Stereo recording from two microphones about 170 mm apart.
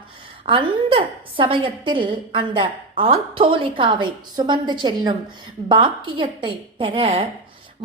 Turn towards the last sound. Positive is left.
turn(degrees=-35)  # may be behind; listen again after turning